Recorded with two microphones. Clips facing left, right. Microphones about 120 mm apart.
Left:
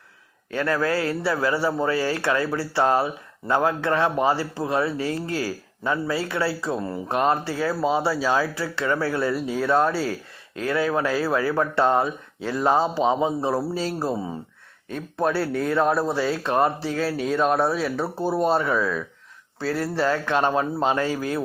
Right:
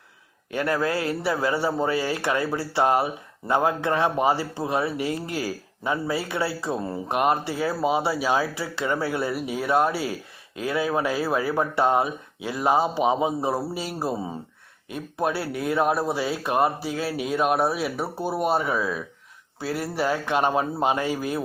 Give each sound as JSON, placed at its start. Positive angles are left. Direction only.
{"t": 0.5, "sound": "speech", "side_deg": -20}